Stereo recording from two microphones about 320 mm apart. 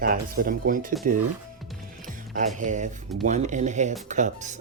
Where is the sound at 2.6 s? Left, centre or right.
Right.